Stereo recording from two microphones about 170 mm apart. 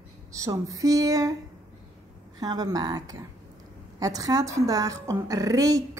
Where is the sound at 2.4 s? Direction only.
20° right (ahead or behind).